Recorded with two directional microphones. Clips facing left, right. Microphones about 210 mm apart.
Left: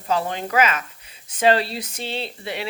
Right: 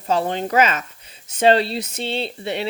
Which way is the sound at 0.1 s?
30° right (ahead or behind).